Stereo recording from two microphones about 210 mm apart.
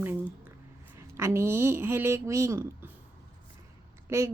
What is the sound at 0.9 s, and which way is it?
Speech, 10° right (ahead or behind).